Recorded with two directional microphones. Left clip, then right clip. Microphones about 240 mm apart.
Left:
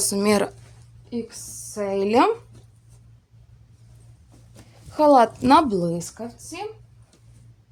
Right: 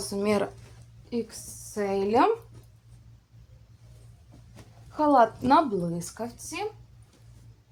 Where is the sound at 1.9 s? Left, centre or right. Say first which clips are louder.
Left 4 dB; left.